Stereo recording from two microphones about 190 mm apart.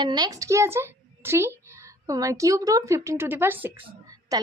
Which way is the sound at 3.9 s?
20° right (ahead or behind).